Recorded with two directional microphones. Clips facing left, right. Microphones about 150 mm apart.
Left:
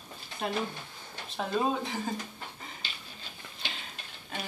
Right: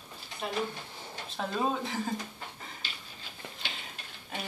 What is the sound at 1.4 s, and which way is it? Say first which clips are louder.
Speech: left 2 dB; centre (ahead or behind).